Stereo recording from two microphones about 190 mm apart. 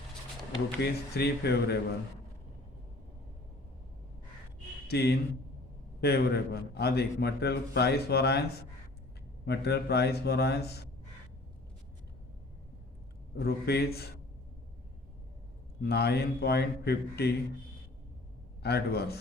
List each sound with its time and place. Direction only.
0.8 s a man's voice: 60° left (ahead or behind)
4.9 s a man's voice: 55° left (ahead or behind)
9.5 s a man's voice: 60° left (ahead or behind)
13.4 s a man's voice: 55° left (ahead or behind)
15.8 s a man's voice: 55° left (ahead or behind)
18.6 s a man's voice: 55° left (ahead or behind)